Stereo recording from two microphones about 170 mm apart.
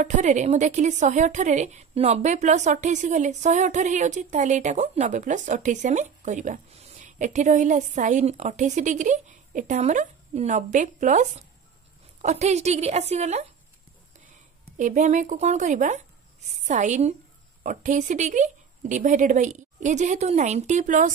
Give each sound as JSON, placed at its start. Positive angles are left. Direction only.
{"t": 0.0, "sound": "a woman's voice", "side_deg": -45}
{"t": 14.8, "sound": "a woman's voice", "side_deg": -50}